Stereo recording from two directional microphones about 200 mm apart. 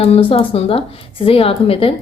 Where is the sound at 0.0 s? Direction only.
30° left (ahead or behind).